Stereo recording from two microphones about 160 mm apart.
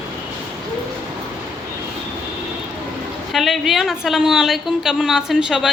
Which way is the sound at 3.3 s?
Centre (ahead or behind).